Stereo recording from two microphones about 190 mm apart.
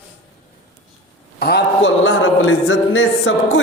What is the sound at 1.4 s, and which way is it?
A man's voice, 60° left (ahead or behind).